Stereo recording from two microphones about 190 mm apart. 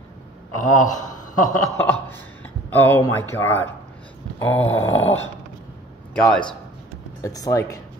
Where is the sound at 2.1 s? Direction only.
10° left (ahead or behind).